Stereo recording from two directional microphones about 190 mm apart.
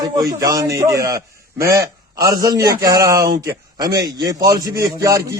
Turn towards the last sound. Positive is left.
turn(degrees=-15)  # may be behind; listen again after turning